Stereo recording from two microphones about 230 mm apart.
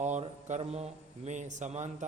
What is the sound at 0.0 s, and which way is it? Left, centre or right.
Speech, right.